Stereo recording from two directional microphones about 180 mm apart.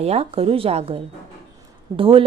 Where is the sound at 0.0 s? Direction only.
35° right (ahead or behind).